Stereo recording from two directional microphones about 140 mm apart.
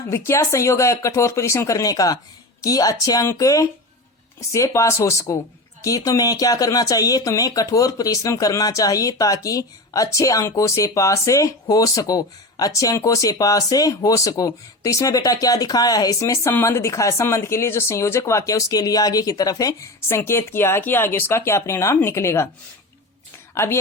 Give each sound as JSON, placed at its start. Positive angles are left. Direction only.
{"t": 0.0, "sound": "speech", "side_deg": 20}
{"t": 23.6, "sound": "speech", "side_deg": 20}